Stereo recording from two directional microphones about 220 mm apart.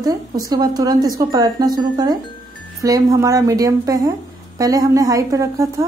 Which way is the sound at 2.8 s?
15° right (ahead or behind).